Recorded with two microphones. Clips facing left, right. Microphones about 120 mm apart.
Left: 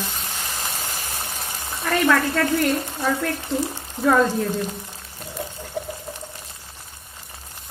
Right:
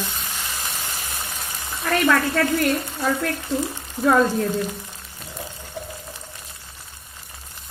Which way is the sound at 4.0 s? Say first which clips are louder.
Even; centre (ahead or behind).